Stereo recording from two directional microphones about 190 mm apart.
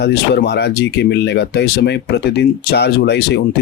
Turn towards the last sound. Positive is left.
turn(degrees=60)  # may be behind; listen again after turning